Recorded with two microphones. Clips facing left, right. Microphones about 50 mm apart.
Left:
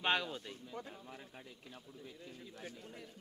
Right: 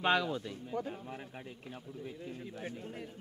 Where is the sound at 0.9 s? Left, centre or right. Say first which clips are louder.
Right 7 dB; right.